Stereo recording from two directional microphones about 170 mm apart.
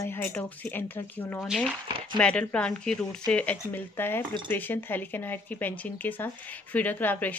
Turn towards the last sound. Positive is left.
turn(degrees=10)  # may be behind; listen again after turning